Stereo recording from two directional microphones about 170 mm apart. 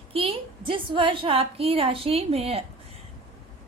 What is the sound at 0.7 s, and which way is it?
A woman's voice, 30° right (ahead or behind).